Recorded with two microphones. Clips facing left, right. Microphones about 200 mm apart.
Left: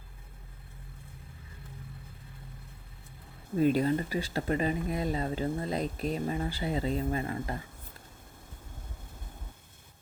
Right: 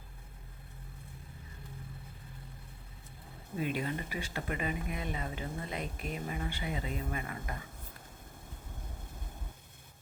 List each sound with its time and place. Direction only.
3.6 s speech: 40° left (ahead or behind)